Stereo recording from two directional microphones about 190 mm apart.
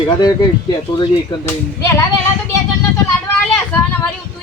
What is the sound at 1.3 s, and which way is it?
Speech, 25° left (ahead or behind).